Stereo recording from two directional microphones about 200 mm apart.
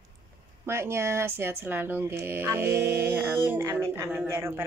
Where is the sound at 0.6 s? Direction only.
15° right (ahead or behind).